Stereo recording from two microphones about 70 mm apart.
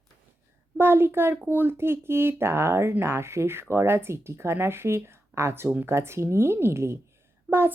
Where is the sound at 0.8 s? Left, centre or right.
Right.